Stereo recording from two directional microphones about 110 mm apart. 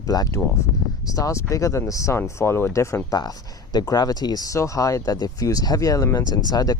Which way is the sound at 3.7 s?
40° left (ahead or behind).